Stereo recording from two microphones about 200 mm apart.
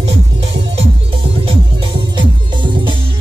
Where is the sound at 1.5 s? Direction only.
25° right (ahead or behind).